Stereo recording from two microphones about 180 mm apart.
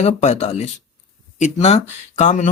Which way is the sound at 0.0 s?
40° left (ahead or behind).